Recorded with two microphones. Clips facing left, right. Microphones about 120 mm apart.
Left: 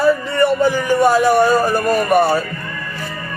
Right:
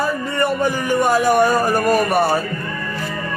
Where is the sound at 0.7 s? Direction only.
15° right (ahead or behind).